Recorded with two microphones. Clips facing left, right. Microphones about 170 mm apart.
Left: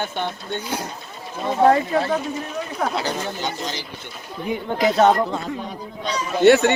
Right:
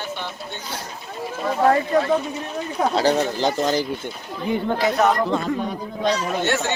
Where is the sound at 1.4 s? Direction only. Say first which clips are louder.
Left 2 dB; 30° left (ahead or behind).